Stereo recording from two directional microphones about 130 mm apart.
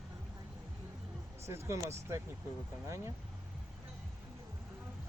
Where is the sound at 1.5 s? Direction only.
20° right (ahead or behind).